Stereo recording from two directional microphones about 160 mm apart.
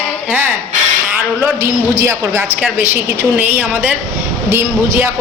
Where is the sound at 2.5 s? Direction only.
10° right (ahead or behind).